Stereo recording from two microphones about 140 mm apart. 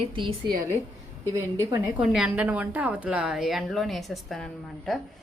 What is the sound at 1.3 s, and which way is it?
Speech, 20° right (ahead or behind).